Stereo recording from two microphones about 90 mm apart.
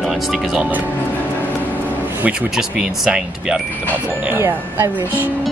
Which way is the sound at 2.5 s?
5° right (ahead or behind).